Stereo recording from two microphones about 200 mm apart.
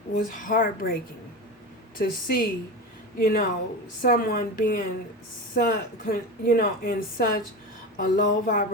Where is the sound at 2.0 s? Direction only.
45° left (ahead or behind).